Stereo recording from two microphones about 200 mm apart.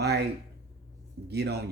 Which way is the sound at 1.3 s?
55° right (ahead or behind).